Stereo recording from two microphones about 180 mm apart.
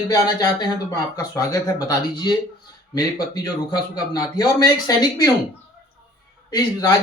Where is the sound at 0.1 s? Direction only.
20° left (ahead or behind).